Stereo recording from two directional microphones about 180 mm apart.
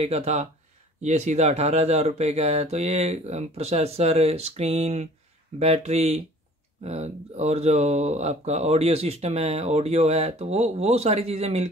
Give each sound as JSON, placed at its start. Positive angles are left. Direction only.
{"t": 0.0, "sound": "speech", "side_deg": -35}